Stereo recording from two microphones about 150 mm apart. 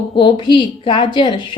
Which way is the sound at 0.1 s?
30° left (ahead or behind).